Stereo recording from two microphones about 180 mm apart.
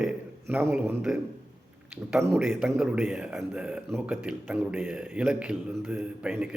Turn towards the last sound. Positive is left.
turn(degrees=-5)  # may be behind; listen again after turning